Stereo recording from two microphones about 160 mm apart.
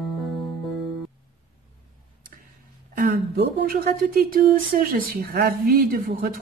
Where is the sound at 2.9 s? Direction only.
65° right (ahead or behind).